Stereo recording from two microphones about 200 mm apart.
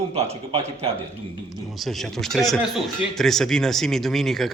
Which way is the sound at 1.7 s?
Centre (ahead or behind).